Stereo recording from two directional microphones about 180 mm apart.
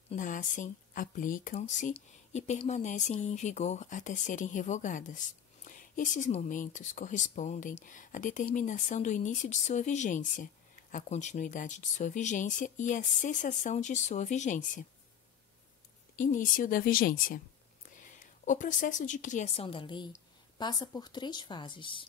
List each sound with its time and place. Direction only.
0.1 s speech: 45° left (ahead or behind)
16.2 s a woman's voice: 45° left (ahead or behind); by 22.0 s 25° left (ahead or behind)